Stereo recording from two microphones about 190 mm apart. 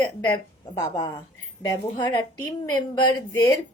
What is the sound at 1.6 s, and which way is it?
A woman's voice, 20° left (ahead or behind).